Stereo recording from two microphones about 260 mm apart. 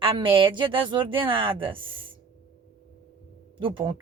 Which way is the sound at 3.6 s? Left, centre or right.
Centre.